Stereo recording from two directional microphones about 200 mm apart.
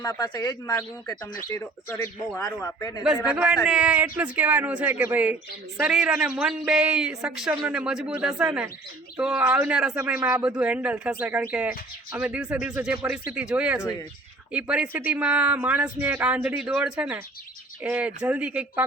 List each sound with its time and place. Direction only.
0.0 s speech: 20° left (ahead or behind)
3.2 s a man's voice: 5° right (ahead or behind)